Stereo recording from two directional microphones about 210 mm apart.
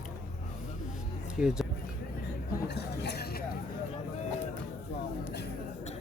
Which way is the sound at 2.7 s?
50° left (ahead or behind).